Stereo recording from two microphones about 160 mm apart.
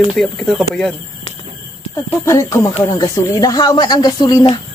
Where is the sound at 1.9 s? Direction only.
20° left (ahead or behind).